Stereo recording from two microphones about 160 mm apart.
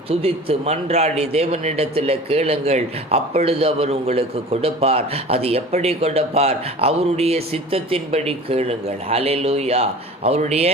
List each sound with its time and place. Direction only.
0.1 s a man's voice: 40° right (ahead or behind)